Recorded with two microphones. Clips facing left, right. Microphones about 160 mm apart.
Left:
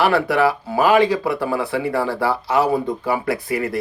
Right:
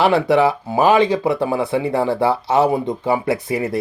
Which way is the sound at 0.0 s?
25° right (ahead or behind).